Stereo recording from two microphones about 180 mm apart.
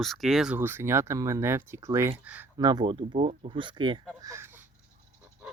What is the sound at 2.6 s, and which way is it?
Speech, 25° right (ahead or behind).